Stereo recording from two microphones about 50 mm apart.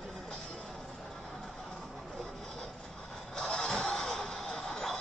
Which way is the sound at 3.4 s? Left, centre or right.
Centre.